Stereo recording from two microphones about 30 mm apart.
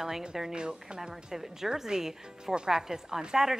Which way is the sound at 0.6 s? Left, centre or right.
Right.